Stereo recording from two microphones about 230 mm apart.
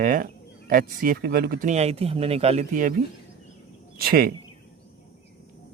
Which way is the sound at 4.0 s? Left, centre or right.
Right.